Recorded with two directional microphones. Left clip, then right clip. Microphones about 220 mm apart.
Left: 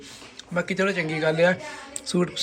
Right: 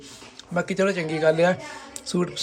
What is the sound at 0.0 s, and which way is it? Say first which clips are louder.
A man's voice: left 1 dB; 15° right (ahead or behind).